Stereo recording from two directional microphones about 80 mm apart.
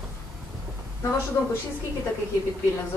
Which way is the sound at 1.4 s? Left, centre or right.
Left.